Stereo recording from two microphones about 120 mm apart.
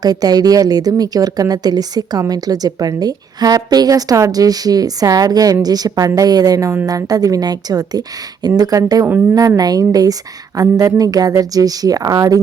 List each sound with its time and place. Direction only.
0.0 s speech: 35° right (ahead or behind)